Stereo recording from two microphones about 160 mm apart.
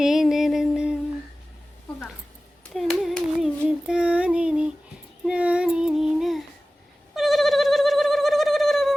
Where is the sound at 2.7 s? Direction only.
Centre (ahead or behind).